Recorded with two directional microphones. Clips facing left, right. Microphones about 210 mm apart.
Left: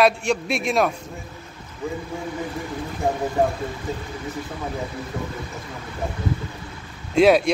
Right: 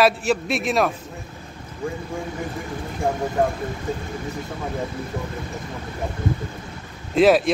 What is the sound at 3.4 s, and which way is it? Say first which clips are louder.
Speech: even; 5° left (ahead or behind).